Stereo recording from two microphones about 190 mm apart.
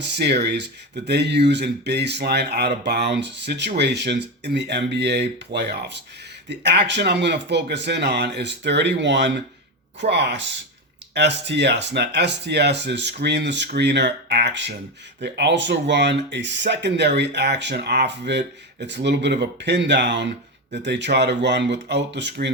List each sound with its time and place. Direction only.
0.0 s speech: 60° right (ahead or behind)